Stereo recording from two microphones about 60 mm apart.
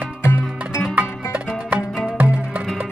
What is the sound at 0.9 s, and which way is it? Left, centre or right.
Music, right.